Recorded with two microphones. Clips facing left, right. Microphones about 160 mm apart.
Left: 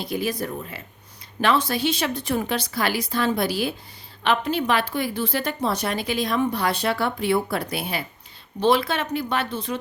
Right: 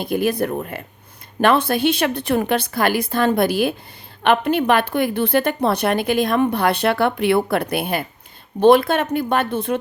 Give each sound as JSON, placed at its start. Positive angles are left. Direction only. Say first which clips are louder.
{"t": 0.0, "sound": "a woman's voice", "louder": "right 7 dB", "side_deg": -55}